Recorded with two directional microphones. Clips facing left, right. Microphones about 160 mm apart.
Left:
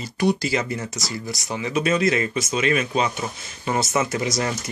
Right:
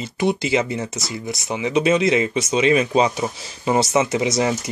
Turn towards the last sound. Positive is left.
turn(degrees=-20)  # may be behind; listen again after turning